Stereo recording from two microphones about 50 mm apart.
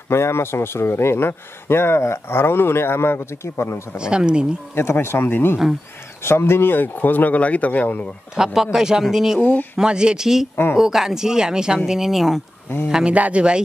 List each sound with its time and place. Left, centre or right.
0.1 s speech: left
4.0 s speech: centre
5.0 s speech: left
8.4 s speech: centre
9.4 s speech: left
9.8 s speech: centre
10.5 s speech: left
10.8 s speech: centre
13.0 s a man's voice: right